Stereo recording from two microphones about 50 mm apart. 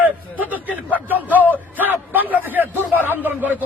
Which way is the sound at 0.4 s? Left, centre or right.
Right.